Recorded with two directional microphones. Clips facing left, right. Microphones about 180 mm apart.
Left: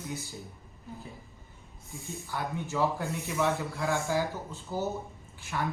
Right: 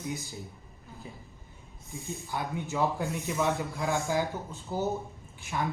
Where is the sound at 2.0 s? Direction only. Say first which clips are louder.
Right 1 dB; 20° right (ahead or behind).